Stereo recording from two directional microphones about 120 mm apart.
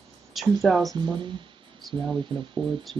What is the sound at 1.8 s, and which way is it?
Speech, centre (ahead or behind).